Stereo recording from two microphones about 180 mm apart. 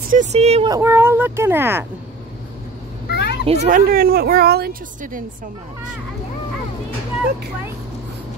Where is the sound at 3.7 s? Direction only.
50° right (ahead or behind).